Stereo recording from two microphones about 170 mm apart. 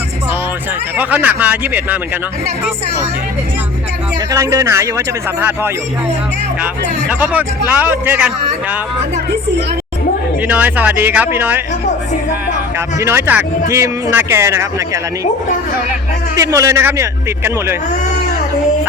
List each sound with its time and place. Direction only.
0.9 s speech: 10° right (ahead or behind)
4.3 s speech: 15° right (ahead or behind)
7.1 s speech: 10° right (ahead or behind)
10.4 s speech: 10° right (ahead or behind)
13.0 s speech: 15° right (ahead or behind)
16.3 s speech: 20° right (ahead or behind)